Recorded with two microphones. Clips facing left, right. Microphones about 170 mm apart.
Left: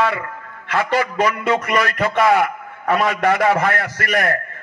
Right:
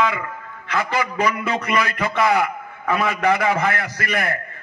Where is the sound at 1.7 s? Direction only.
40° left (ahead or behind).